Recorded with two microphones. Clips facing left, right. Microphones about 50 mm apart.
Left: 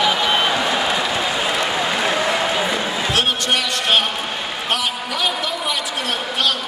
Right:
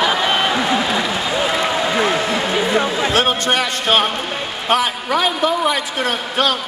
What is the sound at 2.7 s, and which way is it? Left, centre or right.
A man's voice, right.